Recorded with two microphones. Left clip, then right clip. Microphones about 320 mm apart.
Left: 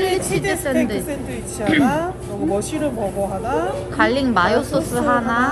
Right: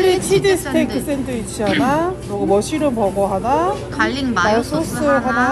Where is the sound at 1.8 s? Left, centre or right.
Right.